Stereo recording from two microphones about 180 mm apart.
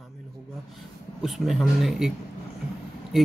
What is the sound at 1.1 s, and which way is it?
Speech, centre (ahead or behind).